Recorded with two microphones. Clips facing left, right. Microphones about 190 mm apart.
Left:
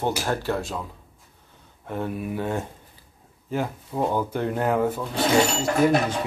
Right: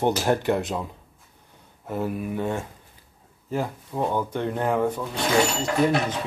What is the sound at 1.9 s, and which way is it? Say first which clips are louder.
Speech: right 1 dB; 5° right (ahead or behind).